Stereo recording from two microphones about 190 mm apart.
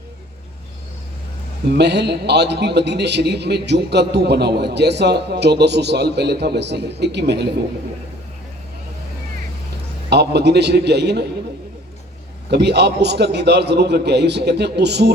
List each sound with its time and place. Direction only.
1.6 s a man's voice: 60° right (ahead or behind)
10.1 s a man's voice: 60° right (ahead or behind)
12.5 s a man's voice: 60° right (ahead or behind)